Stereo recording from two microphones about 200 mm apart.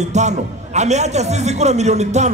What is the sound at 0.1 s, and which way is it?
A man's voice, 35° right (ahead or behind).